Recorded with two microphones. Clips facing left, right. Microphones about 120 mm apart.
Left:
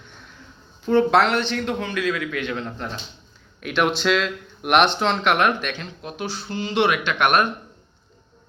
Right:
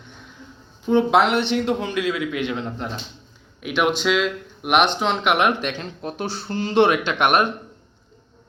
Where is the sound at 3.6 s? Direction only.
10° right (ahead or behind).